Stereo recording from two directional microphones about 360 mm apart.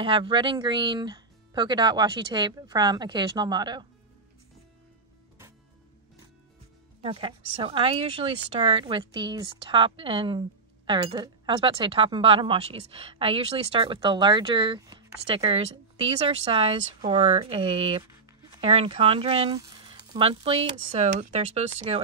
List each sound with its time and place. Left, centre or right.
0.0 s speech: centre
7.0 s speech: centre